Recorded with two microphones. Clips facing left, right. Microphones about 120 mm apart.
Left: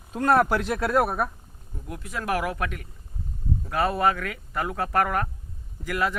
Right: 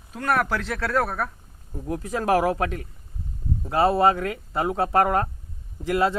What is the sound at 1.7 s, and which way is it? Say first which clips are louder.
Speech: right 7 dB; 35° right (ahead or behind).